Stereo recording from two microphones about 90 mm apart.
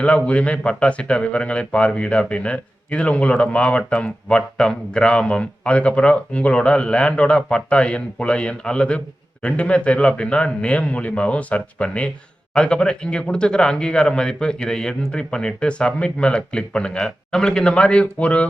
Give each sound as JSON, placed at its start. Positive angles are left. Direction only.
{"t": 0.3, "sound": "speech", "side_deg": 15}